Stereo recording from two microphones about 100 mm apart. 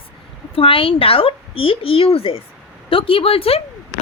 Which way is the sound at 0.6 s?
65° left (ahead or behind).